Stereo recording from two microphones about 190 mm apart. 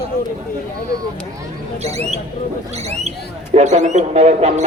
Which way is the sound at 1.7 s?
35° right (ahead or behind).